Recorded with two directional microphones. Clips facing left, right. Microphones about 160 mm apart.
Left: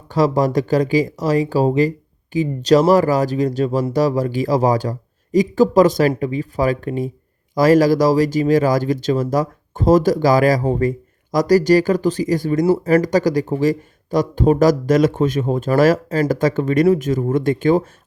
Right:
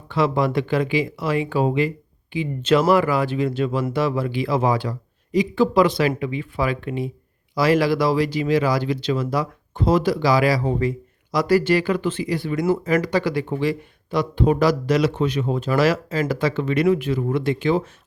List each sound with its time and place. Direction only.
0.1 s speech: 40° left (ahead or behind)